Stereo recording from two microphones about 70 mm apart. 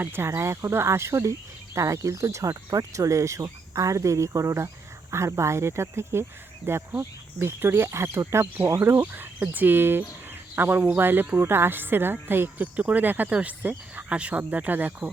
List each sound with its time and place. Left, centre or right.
0.0 s a woman's voice: right